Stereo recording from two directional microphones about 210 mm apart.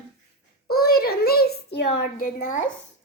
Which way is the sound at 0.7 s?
45° left (ahead or behind).